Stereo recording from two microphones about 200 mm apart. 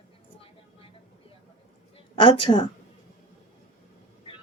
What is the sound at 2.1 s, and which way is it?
Speech, 25° left (ahead or behind).